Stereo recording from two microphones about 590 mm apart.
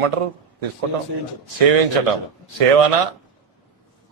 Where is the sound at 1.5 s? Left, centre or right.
Right.